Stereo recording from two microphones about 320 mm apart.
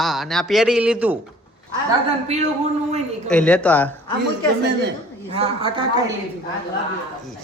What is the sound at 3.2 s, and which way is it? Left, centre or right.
Speech, centre.